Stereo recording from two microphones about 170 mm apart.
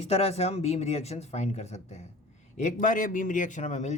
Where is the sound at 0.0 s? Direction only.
35° left (ahead or behind).